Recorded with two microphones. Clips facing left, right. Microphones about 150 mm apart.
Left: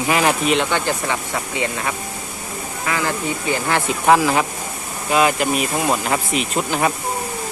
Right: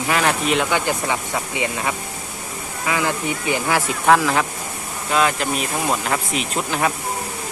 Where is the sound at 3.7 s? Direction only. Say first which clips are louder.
Left 1 dB; centre (ahead or behind).